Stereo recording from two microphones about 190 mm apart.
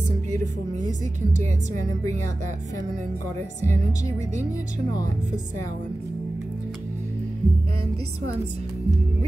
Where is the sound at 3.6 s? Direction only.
40° right (ahead or behind).